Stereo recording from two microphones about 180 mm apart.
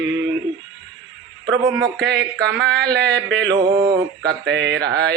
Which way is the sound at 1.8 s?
5° left (ahead or behind).